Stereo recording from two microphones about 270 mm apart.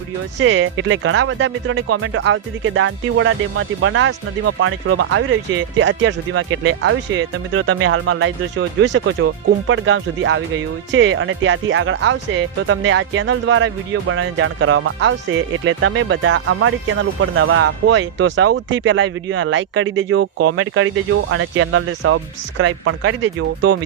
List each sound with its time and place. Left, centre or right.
0.3 s speech: right